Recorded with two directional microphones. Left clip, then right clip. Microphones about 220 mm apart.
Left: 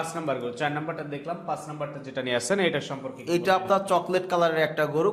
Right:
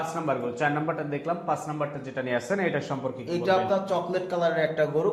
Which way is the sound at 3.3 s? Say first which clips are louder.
Left 2 dB; 40° left (ahead or behind).